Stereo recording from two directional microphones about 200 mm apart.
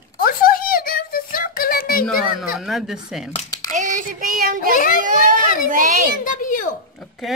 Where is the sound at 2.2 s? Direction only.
Centre (ahead or behind).